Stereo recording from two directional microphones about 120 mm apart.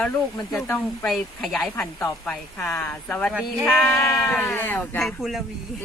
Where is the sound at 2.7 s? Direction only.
15° left (ahead or behind).